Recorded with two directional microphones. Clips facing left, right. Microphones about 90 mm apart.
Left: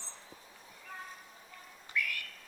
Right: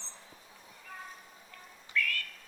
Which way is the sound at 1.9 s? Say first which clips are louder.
Right 3 dB; 15° left (ahead or behind).